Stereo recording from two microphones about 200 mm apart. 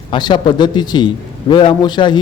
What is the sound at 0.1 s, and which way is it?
A man's voice, 20° left (ahead or behind).